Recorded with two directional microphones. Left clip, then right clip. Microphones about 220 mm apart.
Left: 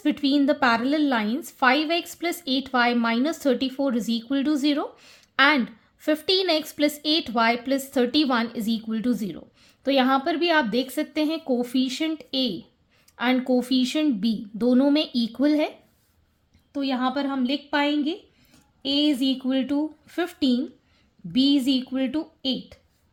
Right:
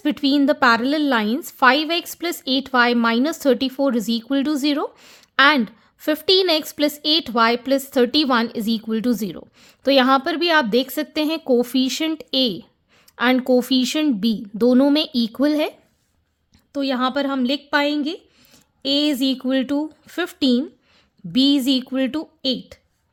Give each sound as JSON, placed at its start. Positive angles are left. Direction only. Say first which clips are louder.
{"t": 0.0, "sound": "a woman's voice", "louder": "right 3 dB", "side_deg": -30}
{"t": 16.7, "sound": "a woman's voice", "louder": "right 5 dB", "side_deg": -45}